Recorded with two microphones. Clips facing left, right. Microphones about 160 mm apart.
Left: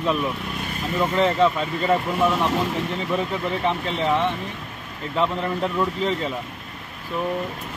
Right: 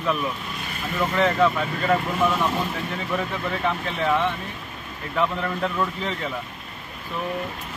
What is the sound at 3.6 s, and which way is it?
Speech, 25° left (ahead or behind).